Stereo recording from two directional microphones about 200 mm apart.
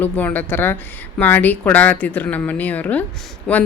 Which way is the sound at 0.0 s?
10° left (ahead or behind).